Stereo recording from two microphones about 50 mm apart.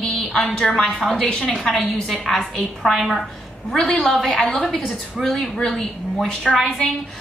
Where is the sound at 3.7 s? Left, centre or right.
Centre.